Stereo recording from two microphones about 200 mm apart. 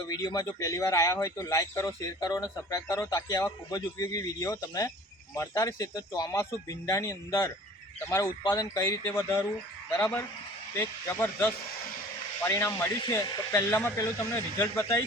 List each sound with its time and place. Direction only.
0.1 s speech: 15° left (ahead or behind)